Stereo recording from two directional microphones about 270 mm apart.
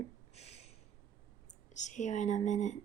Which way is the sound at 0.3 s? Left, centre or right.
Left.